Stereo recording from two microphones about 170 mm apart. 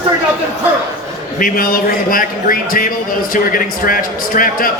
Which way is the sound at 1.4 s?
55° left (ahead or behind).